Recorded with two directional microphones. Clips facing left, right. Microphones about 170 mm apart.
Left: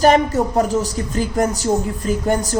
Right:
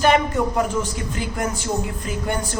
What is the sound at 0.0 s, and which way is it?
Speech, 40° left (ahead or behind).